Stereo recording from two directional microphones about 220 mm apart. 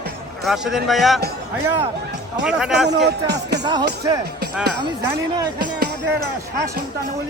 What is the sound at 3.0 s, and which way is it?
Speech, 50° right (ahead or behind).